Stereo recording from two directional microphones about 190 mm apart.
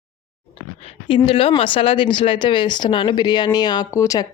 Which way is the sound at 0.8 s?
30° left (ahead or behind).